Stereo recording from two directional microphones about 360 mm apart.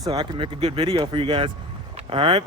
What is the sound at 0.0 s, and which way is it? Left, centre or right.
Speech, centre.